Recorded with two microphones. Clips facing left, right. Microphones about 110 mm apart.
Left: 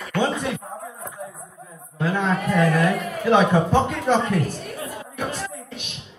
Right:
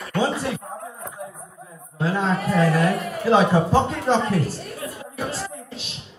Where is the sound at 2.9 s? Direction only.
Centre (ahead or behind).